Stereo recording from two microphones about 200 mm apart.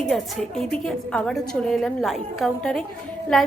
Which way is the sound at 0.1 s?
Centre (ahead or behind).